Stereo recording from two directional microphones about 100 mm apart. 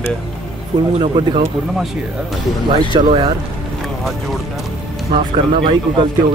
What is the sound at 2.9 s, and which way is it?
Speech, 50° right (ahead or behind).